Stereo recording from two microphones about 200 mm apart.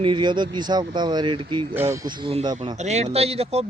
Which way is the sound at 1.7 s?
10° right (ahead or behind).